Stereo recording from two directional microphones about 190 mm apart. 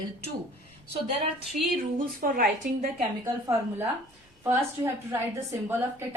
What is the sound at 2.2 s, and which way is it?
Speech, 50° right (ahead or behind).